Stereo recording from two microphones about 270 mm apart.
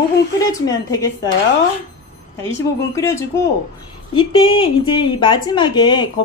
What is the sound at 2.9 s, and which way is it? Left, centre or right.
Speech, centre.